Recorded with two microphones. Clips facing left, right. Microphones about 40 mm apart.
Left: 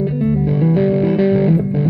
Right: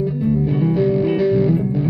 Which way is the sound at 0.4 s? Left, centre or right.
Centre.